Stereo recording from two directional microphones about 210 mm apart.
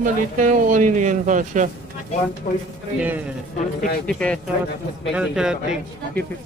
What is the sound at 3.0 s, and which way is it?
Speech, 10° right (ahead or behind).